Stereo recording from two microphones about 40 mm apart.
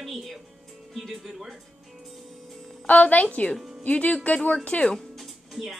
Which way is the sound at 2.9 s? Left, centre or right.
Left.